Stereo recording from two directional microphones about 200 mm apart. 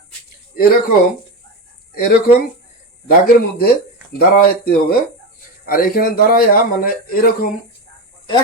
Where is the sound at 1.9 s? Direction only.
50° left (ahead or behind).